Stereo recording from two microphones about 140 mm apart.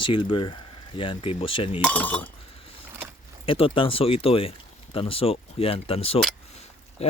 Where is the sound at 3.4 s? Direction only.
40° left (ahead or behind).